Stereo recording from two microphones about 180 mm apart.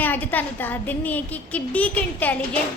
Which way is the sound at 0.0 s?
10° left (ahead or behind).